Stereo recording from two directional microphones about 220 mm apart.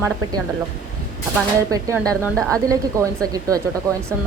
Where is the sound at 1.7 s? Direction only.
15° right (ahead or behind).